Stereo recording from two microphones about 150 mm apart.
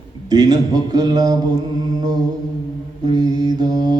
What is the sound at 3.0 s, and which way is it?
Mantra, 30° right (ahead or behind).